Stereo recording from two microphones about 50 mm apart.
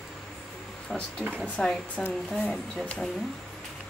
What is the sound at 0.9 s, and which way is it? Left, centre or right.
A woman's voice, centre.